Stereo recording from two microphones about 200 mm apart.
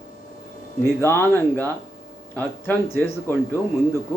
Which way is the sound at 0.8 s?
10° left (ahead or behind).